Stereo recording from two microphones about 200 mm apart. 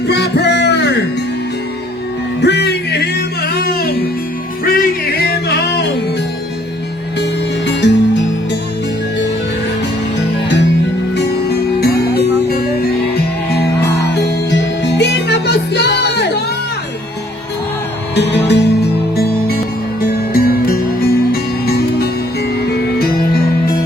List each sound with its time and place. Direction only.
0.1 s music: 55° left (ahead or behind)
2.4 s music: 55° left (ahead or behind)
7.8 s music: 65° left (ahead or behind)
11.2 s music: 55° left (ahead or behind)
18.1 s music: 60° left (ahead or behind)